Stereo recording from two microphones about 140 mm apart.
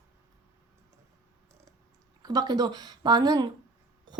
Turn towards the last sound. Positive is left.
turn(degrees=-30)  # may be behind; listen again after turning